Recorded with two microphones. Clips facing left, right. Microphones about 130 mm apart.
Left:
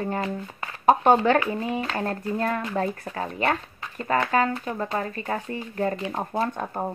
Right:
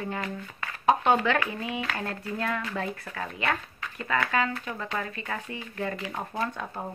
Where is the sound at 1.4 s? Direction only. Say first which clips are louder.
Left 5 dB; 35° left (ahead or behind).